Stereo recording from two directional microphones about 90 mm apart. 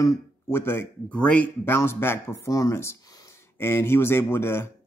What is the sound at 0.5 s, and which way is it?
Speech, 25° left (ahead or behind).